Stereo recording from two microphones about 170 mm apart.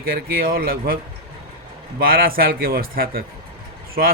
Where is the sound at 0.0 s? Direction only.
60° right (ahead or behind).